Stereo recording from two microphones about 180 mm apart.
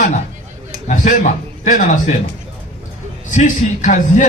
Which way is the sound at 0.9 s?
45° left (ahead or behind).